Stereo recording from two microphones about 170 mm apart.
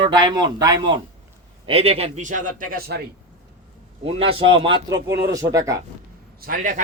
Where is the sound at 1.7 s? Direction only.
35° right (ahead or behind); by 3.0 s 70° right (ahead or behind).